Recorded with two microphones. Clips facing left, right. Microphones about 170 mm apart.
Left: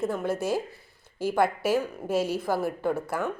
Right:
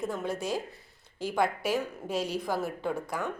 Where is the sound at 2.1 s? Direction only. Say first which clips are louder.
Left 5 dB; 5° left (ahead or behind).